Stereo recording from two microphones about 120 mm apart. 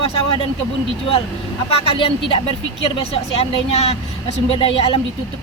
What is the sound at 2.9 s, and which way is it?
A woman's voice, 55° left (ahead or behind).